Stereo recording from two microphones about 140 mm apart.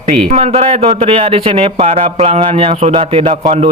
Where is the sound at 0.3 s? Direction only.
50° right (ahead or behind).